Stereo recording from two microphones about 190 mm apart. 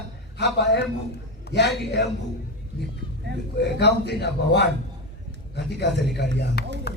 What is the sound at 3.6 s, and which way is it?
A man's voice, 60° left (ahead or behind).